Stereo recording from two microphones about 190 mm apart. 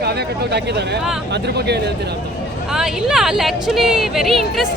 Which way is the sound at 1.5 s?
60° right (ahead or behind).